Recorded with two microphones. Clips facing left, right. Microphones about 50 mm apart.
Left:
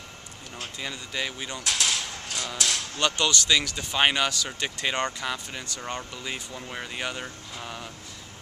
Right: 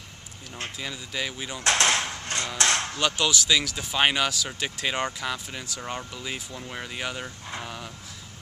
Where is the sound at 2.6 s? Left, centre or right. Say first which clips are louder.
Right 6 dB; right.